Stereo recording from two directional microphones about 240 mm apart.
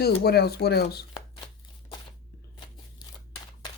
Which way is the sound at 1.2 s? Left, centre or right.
Left.